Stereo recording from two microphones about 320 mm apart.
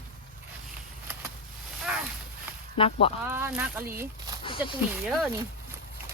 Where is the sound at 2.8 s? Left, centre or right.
Centre.